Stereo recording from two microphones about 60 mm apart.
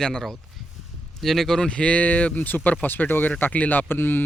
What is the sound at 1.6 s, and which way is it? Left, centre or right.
Speech, centre.